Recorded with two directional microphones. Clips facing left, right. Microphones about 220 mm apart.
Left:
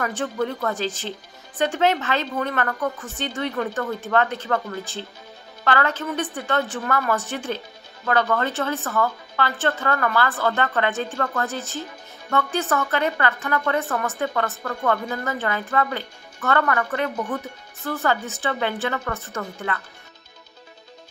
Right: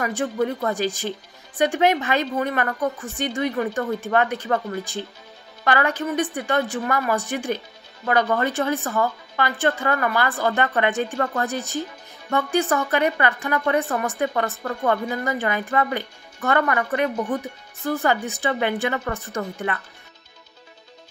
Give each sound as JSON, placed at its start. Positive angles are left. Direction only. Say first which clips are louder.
{"t": 0.0, "sound": "a woman's voice", "louder": "right 2 dB", "side_deg": -10}